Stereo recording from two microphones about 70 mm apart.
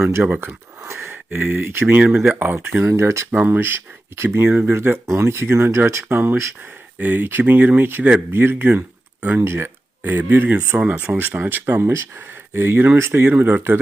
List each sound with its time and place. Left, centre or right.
0.0 s speech: right
0.3 s a sound: right
1.3 s speech: right
2.0 s speech: centre
2.3 s speech: right
2.9 s speech: right
3.3 s speech: right
7.0 s speech: right